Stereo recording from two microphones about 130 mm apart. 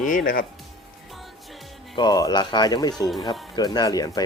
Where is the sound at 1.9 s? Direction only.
35° left (ahead or behind).